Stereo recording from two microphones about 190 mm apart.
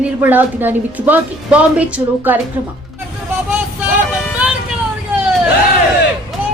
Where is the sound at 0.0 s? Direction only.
10° right (ahead or behind).